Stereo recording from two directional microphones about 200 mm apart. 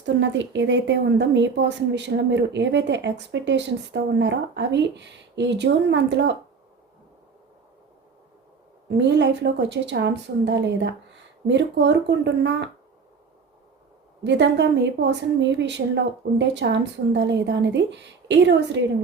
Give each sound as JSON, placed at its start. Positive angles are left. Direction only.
{"t": 0.0, "sound": "a woman's voice", "side_deg": -65}
{"t": 8.9, "sound": "a woman's voice", "side_deg": -60}
{"t": 14.3, "sound": "a woman's voice", "side_deg": -60}